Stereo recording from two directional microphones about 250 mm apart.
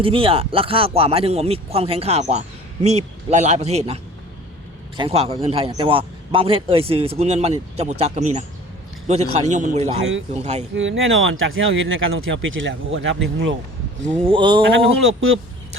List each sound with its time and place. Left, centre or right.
0.0 s a man's voice: right
10.8 s speech: right
14.0 s a man's voice: right
15.0 s speech: right